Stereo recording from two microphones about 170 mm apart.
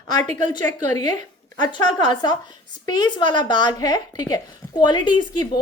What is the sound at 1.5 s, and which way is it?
Speech, 25° left (ahead or behind).